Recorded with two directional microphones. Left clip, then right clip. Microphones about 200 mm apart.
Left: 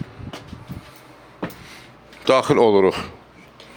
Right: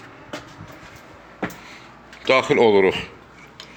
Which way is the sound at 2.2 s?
40° left (ahead or behind).